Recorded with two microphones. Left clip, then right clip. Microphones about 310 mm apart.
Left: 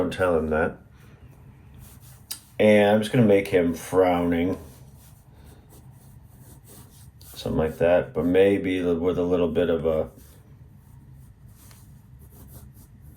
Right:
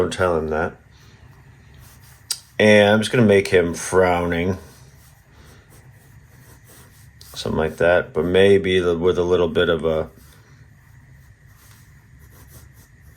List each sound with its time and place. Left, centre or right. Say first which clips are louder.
0.1 s speech: right 2 dB; centre
2.2 s speech: right 4 dB; right
7.3 s speech: right 4 dB; right